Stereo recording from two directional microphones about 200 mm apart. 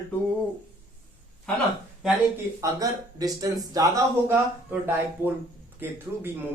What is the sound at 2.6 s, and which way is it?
Speech, 15° right (ahead or behind).